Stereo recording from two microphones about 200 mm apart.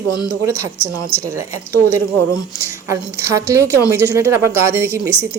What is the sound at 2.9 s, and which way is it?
A woman's voice, 15° right (ahead or behind).